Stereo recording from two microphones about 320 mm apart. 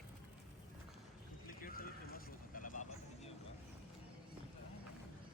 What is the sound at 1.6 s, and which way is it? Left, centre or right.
Vehicle, left.